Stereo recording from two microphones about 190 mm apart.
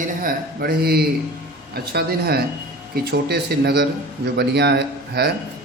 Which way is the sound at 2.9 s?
55° right (ahead or behind).